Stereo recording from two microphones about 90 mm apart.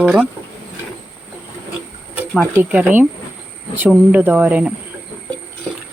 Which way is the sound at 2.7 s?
20° right (ahead or behind).